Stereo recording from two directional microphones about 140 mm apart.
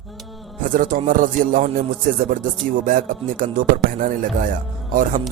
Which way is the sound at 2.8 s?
80° right.